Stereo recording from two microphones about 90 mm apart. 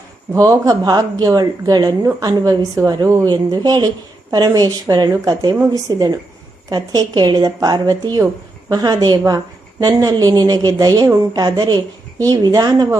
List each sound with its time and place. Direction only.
0.3 s a woman's voice: 40° right (ahead or behind)